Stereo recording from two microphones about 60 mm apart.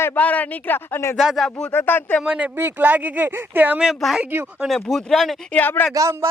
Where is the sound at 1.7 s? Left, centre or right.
Left.